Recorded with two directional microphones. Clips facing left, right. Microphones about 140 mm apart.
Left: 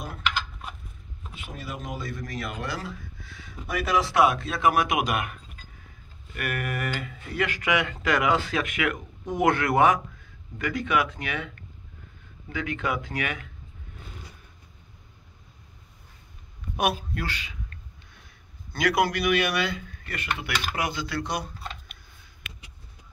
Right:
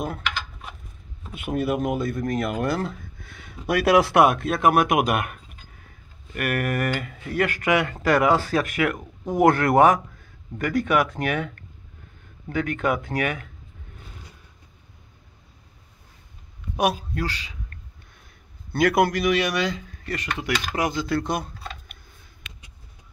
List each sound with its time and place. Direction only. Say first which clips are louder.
1.3 s speech: right 14 dB; 60° right (ahead or behind)
16.7 s speech: right 3 dB; 35° right (ahead or behind)
18.7 s speech: right 4 dB; 50° right (ahead or behind)
19.2 s speech: right 2 dB; 35° right (ahead or behind); by 21.9 s 50° right (ahead or behind)